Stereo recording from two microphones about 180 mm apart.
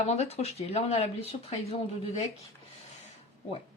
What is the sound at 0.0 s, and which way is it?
Speech, 35° left (ahead or behind).